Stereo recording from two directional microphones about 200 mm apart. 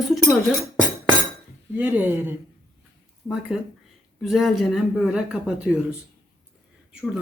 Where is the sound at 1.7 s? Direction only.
10° right (ahead or behind).